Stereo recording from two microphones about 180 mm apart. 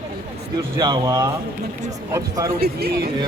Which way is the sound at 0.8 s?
20° right (ahead or behind).